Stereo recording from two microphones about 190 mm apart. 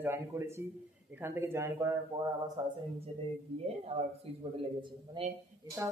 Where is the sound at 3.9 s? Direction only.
30° right (ahead or behind).